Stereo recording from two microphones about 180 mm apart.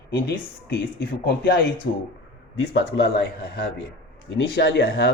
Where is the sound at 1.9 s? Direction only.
70° left (ahead or behind).